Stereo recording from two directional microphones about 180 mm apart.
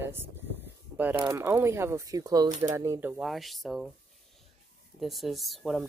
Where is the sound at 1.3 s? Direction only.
15° right (ahead or behind).